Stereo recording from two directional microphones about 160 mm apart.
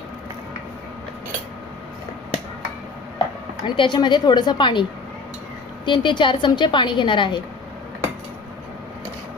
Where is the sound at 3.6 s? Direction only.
30° left (ahead or behind).